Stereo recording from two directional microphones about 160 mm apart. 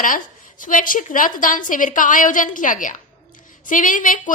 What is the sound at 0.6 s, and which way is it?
A woman's voice, 55° left (ahead or behind).